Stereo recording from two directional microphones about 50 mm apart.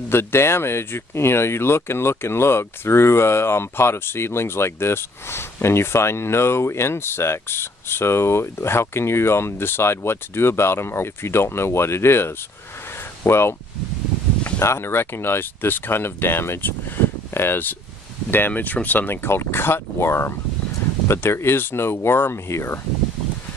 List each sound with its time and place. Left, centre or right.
0.1 s speech: left
14.6 s speech: left
18.5 s speech: left
19.2 s speech: left